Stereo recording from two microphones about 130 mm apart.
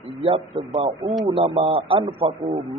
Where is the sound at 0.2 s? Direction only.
45° right (ahead or behind).